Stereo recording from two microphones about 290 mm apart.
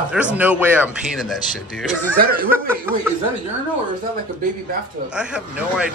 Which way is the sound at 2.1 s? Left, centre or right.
Right.